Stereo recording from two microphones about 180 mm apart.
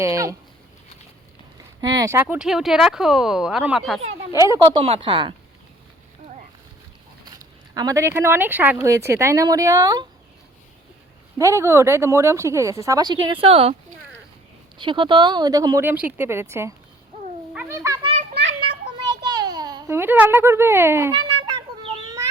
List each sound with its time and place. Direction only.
0.0 s speech: 15° right (ahead or behind)
1.8 s speech: 20° right (ahead or behind); by 4.0 s centre (ahead or behind)
4.8 s speech: 30° right (ahead or behind)
7.3 s speech: 20° right (ahead or behind)
11.3 s speech: 15° right (ahead or behind); by 13.7 s 30° right (ahead or behind)
14.8 s speech: 25° right (ahead or behind)
17.5 s cat: 10° right (ahead or behind)
17.8 s a child's voice: 20° right (ahead or behind)
18.9 s a sound: 20° right (ahead or behind)